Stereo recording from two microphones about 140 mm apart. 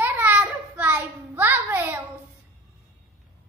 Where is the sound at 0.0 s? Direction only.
10° right (ahead or behind).